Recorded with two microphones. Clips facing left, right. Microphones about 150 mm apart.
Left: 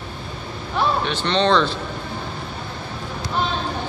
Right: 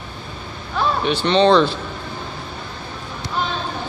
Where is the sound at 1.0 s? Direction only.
10° right (ahead or behind).